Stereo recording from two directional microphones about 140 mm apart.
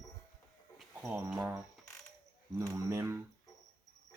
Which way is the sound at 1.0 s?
15° right (ahead or behind).